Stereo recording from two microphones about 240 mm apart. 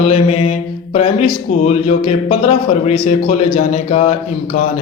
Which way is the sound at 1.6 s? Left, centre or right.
Left.